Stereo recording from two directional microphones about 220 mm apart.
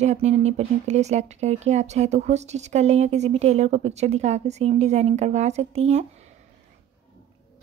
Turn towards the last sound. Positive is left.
turn(degrees=-30)  # may be behind; listen again after turning